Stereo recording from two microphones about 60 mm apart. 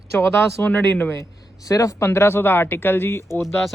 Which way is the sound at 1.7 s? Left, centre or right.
Left.